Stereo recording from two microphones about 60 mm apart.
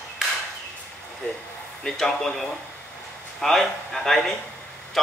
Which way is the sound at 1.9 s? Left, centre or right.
Centre.